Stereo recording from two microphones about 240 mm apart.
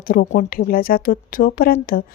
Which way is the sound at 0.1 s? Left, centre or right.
Left.